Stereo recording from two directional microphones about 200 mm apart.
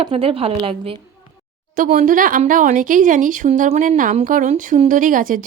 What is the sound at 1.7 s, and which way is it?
Speech, 40° right (ahead or behind).